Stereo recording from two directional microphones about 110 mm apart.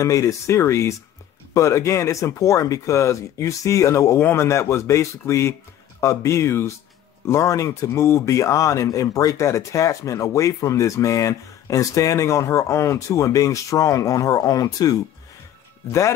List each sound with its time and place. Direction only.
0.0 s speech: 30° left (ahead or behind)